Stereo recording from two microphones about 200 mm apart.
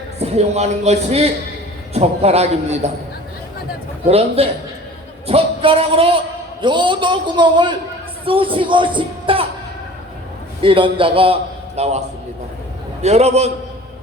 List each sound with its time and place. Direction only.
0.2 s a man's voice: 35° right (ahead or behind)
4.0 s a man's voice: 30° right (ahead or behind)
10.6 s a man's voice: 25° right (ahead or behind)